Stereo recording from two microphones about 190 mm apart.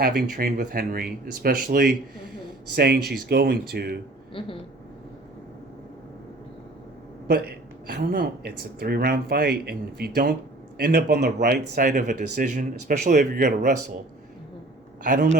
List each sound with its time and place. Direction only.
0.0 s speech: 55° right (ahead or behind)
4.4 s speech: 30° left (ahead or behind)
7.3 s speech: 55° right (ahead or behind)